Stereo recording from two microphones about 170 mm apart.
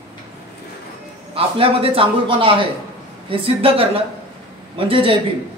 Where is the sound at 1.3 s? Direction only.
35° right (ahead or behind).